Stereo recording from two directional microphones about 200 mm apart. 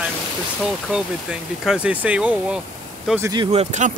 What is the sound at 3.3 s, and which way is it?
Speech, 25° right (ahead or behind).